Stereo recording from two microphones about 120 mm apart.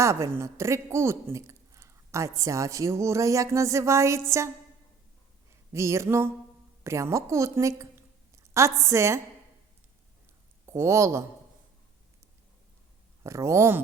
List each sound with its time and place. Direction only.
0.0 s a woman's voice: 25° right (ahead or behind)
5.7 s a woman's voice: 25° right (ahead or behind)
10.7 s a woman's voice: 25° right (ahead or behind)
13.2 s a woman's voice: 25° right (ahead or behind)